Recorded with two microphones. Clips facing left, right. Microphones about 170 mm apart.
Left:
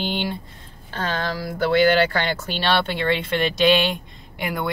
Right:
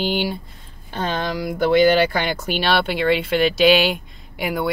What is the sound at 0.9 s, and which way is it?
Speech, 20° right (ahead or behind).